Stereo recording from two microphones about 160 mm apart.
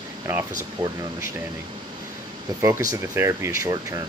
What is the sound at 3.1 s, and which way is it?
Speech, 15° right (ahead or behind).